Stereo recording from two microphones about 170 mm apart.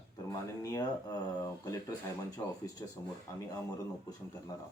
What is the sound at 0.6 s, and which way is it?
Speech, 20° left (ahead or behind).